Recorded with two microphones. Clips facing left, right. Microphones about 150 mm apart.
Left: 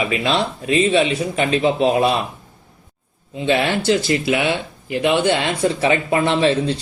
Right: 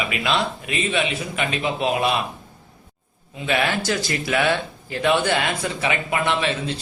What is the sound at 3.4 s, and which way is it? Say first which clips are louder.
Speech: left 5 dB; 25° left (ahead or behind).